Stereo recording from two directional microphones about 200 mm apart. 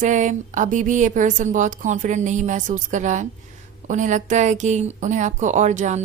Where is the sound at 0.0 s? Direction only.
40° right (ahead or behind).